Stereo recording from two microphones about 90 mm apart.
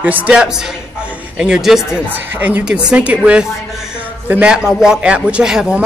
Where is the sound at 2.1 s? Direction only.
20° right (ahead or behind).